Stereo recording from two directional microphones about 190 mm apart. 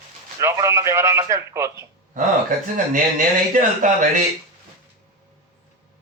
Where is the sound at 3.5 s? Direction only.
40° right (ahead or behind).